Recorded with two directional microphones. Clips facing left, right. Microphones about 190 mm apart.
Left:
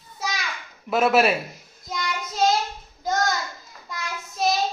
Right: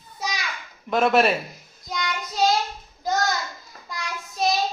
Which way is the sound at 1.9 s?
Centre (ahead or behind).